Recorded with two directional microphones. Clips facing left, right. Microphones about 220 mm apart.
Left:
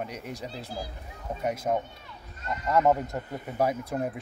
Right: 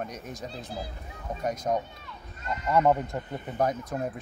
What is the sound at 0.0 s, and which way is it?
Speech, 10° left (ahead or behind).